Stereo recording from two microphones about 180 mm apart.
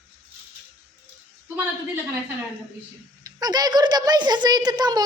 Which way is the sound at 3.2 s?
20° right (ahead or behind).